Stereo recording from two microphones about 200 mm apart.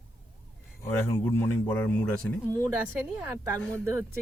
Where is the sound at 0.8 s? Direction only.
10° left (ahead or behind).